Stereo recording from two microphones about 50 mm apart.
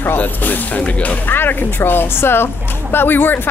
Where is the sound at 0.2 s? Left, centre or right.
Left.